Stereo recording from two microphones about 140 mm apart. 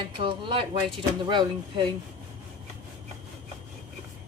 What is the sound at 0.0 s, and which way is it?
A woman's voice, 35° right (ahead or behind).